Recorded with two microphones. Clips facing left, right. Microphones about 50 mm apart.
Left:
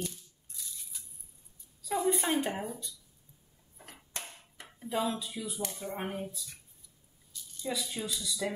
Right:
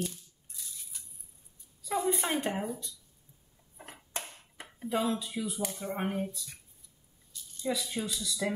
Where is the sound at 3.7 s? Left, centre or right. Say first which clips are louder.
Right 3 dB; right.